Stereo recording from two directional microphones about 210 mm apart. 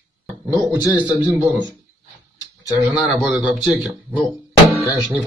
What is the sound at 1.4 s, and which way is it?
Speech, 20° right (ahead or behind).